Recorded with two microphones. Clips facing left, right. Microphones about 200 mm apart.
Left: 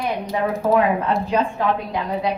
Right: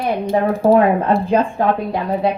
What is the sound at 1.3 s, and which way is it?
Speech, 50° right (ahead or behind).